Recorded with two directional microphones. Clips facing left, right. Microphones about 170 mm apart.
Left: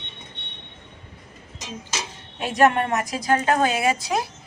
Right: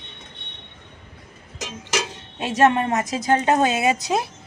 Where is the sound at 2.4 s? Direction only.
25° right (ahead or behind).